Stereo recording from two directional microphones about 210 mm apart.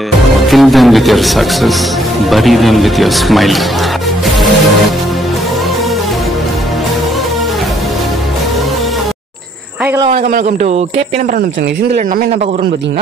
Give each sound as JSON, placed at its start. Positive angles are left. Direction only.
{"t": 0.5, "sound": "speech", "side_deg": 0}
{"t": 10.1, "sound": "a man's voice", "side_deg": -45}